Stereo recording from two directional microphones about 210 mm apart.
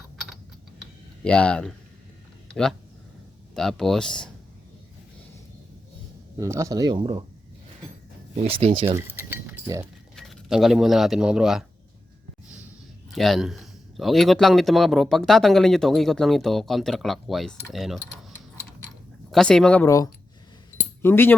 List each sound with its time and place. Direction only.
1.2 s speech: 5° left (ahead or behind)
3.5 s speech: centre (ahead or behind)
6.4 s speech: 15° right (ahead or behind)
8.4 s speech: 25° right (ahead or behind)
9.0 s a sound: 10° right (ahead or behind)
10.2 s speech: centre (ahead or behind)
13.1 s speech: centre (ahead or behind)
19.3 s speech: 5° left (ahead or behind)